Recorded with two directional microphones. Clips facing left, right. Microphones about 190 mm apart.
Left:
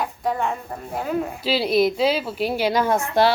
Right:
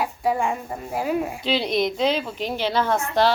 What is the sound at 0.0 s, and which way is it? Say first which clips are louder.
Speech: right 1 dB; 10° right (ahead or behind).